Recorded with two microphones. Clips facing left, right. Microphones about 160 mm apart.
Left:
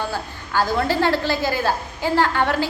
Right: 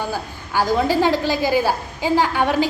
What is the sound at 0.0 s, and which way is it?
A woman's voice, 15° right (ahead or behind).